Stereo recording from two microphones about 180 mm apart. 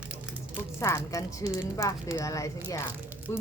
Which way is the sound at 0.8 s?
15° left (ahead or behind).